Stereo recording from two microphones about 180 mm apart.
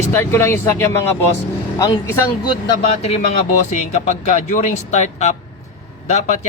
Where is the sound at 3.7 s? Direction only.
40° left (ahead or behind).